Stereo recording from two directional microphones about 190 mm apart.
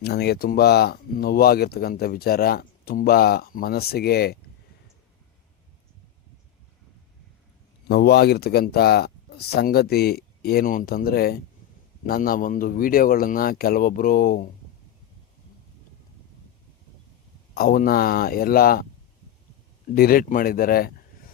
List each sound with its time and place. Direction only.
0.0 s speech: 60° left (ahead or behind)
7.9 s speech: 60° left (ahead or behind)
17.5 s speech: 50° left (ahead or behind)
19.9 s speech: 50° left (ahead or behind)